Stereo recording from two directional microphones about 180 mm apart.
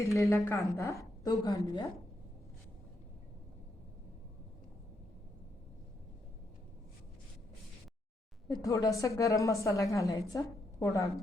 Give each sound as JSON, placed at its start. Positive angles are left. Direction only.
{"t": 0.0, "sound": "a woman's voice", "side_deg": 15}
{"t": 8.4, "sound": "a woman's voice", "side_deg": 20}